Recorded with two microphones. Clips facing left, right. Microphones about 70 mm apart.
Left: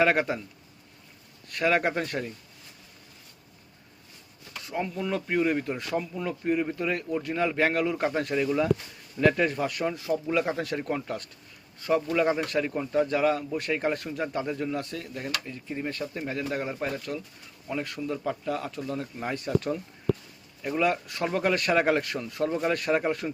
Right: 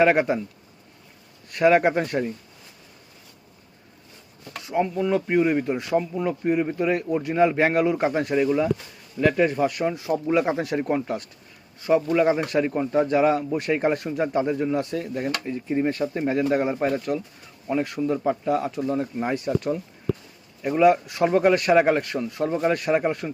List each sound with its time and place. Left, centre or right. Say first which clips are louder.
0.0 s speech: right 5 dB; centre
1.5 s speech: right 7 dB; centre
4.6 s a man's voice: right 7 dB; centre
19.4 s a man's voice: right 3 dB; centre